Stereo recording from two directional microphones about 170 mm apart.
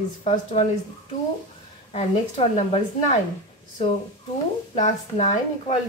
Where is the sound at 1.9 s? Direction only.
40° left (ahead or behind).